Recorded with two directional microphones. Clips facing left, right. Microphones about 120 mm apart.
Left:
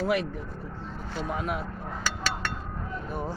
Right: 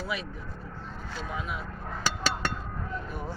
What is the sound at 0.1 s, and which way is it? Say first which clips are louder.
Speech: left 8 dB; 85° left.